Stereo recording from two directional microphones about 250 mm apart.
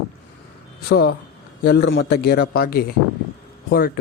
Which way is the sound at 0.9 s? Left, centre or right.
Left.